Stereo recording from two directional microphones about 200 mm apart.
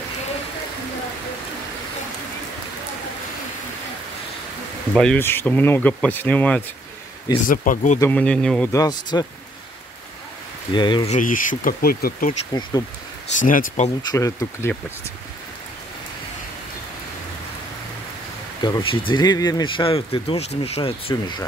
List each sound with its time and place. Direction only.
4.9 s speech: 5° left (ahead or behind)
7.4 s speech: 45° left (ahead or behind)
8.0 s speech: 10° left (ahead or behind)
8.7 s speech: 20° left (ahead or behind)
10.7 s speech: 20° left (ahead or behind)
11.1 s speech: 40° left (ahead or behind)
13.4 s speech: 40° left (ahead or behind)
13.8 s speech: 15° left (ahead or behind)
18.6 s speech: 25° left (ahead or behind)
21.1 s speech: 20° left (ahead or behind)